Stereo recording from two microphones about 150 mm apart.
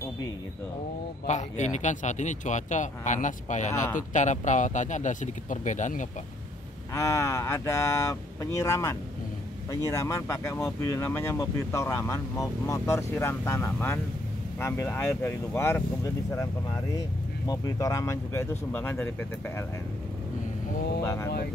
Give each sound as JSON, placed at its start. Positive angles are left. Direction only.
{"t": 1.2, "sound": "speech", "side_deg": 50}
{"t": 6.9, "sound": "speech", "side_deg": 20}
{"t": 17.5, "sound": "speech", "side_deg": 20}
{"t": 21.0, "sound": "speech", "side_deg": 15}